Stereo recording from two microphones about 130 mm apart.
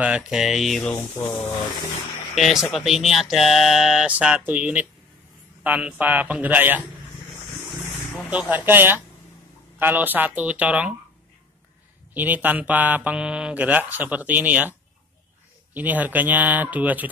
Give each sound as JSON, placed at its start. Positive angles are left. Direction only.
{"t": 0.0, "sound": "speech", "side_deg": -5}
{"t": 0.9, "sound": "speech", "side_deg": 20}
{"t": 2.3, "sound": "speech", "side_deg": 0}
{"t": 8.3, "sound": "speech", "side_deg": -10}
{"t": 12.1, "sound": "speech", "side_deg": -15}